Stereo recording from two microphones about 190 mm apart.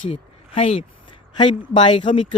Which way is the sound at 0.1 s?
30° left (ahead or behind).